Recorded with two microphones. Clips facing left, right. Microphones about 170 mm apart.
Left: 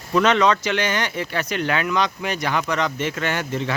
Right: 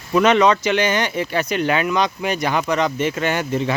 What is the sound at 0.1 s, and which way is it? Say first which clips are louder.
Speech: right 3 dB; 10° right (ahead or behind).